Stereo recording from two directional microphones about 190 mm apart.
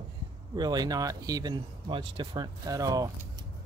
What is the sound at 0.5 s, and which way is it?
Speech, 20° right (ahead or behind).